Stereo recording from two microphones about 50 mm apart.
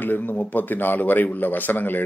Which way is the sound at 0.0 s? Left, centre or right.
Left.